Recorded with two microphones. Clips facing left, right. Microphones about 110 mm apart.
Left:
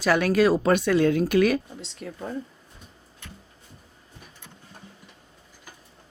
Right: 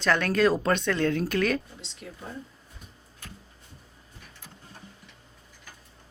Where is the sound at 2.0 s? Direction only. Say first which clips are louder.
Left 6 dB; 50° left (ahead or behind).